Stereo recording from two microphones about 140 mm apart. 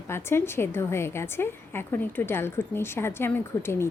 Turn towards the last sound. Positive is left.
turn(degrees=15)  # may be behind; listen again after turning